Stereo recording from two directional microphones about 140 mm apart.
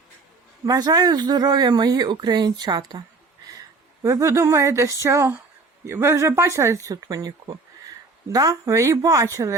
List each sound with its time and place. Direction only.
0.6 s speech: 25° right (ahead or behind)
4.0 s speech: 20° right (ahead or behind)